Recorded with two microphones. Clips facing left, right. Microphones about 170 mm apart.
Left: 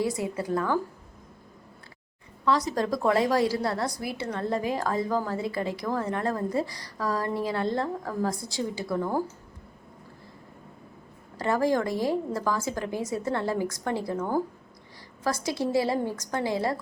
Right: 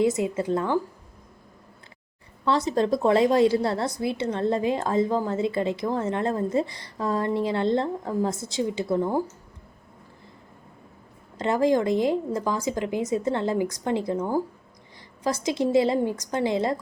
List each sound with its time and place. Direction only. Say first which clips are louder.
0.0 s a woman's voice: right 5 dB; 20° right (ahead or behind)
2.4 s a woman's voice: right 3 dB; 25° right (ahead or behind)
11.3 s a woman's voice: right 3 dB; 20° right (ahead or behind)